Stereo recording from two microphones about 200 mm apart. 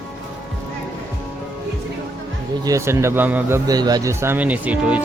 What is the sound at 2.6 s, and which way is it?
Speech, 15° right (ahead or behind).